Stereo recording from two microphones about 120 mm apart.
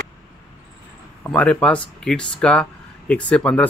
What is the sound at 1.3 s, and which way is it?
Speech, 10° left (ahead or behind).